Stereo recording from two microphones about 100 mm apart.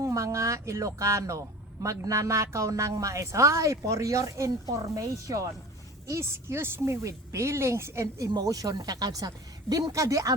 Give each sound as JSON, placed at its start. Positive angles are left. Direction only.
{"t": 0.0, "sound": "a woman's voice", "side_deg": -30}
{"t": 8.4, "sound": "speech", "side_deg": -35}